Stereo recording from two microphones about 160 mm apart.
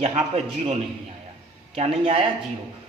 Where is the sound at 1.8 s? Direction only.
35° right (ahead or behind).